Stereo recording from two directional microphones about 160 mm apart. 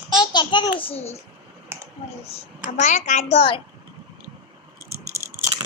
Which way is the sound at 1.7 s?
15° right (ahead or behind).